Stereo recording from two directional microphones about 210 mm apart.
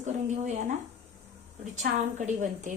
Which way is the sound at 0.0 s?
35° right (ahead or behind).